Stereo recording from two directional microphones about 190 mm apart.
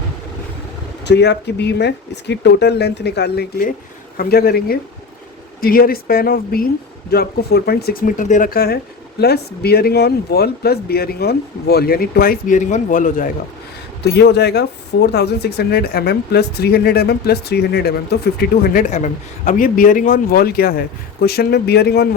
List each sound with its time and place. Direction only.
1.0 s speech: 65° left (ahead or behind); by 13.3 s 45° left (ahead or behind)
14.0 s speech: 60° left (ahead or behind)